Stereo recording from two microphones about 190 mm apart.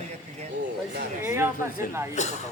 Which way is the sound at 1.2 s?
15° right (ahead or behind).